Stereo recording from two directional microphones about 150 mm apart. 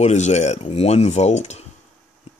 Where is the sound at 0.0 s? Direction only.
50° left (ahead or behind).